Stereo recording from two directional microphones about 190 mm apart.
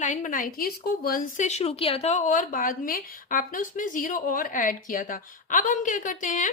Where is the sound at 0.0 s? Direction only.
40° left (ahead or behind).